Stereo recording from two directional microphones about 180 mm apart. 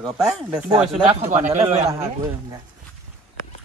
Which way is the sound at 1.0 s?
35° right (ahead or behind).